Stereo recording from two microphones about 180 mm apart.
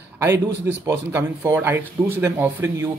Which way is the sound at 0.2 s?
15° right (ahead or behind).